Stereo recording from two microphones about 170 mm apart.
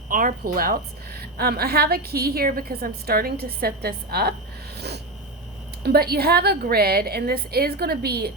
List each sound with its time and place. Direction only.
0.1 s a woman's voice: 55° right (ahead or behind)
5.8 s a woman's voice: 65° right (ahead or behind)